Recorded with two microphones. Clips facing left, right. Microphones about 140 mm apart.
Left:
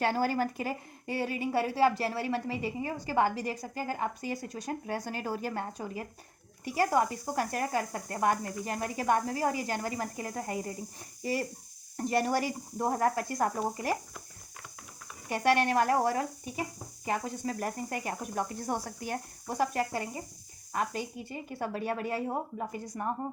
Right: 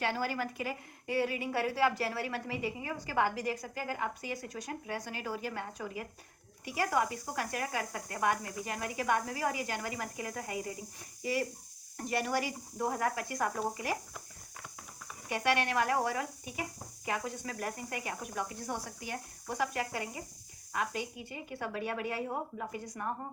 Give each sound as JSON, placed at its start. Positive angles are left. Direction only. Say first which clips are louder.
{"t": 0.0, "sound": "a woman's voice", "louder": "left 5 dB", "side_deg": 40}
{"t": 15.3, "sound": "a woman's voice", "louder": "left 5 dB", "side_deg": 40}